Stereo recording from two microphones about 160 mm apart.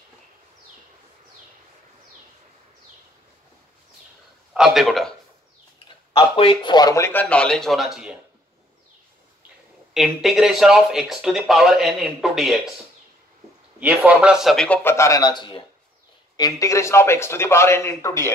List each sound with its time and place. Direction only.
4.6 s speech: 5° right (ahead or behind)
6.1 s speech: 30° left (ahead or behind); by 8.2 s 5° right (ahead or behind)
9.9 s speech: centre (ahead or behind)
13.7 s speech: 10° right (ahead or behind); by 18.3 s 15° left (ahead or behind)